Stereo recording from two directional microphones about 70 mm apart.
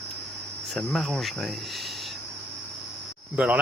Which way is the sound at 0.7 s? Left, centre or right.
Centre.